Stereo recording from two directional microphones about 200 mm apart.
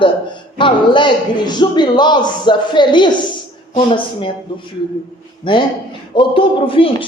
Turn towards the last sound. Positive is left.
turn(degrees=25)  # may be behind; listen again after turning